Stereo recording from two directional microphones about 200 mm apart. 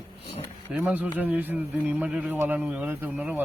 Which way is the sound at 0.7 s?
5° right (ahead or behind).